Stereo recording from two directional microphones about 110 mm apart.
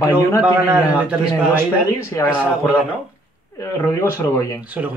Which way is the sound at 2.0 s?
25° left (ahead or behind).